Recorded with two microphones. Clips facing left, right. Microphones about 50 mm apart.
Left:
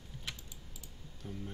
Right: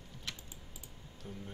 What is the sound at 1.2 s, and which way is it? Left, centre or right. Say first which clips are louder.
Speech: left 2 dB; centre.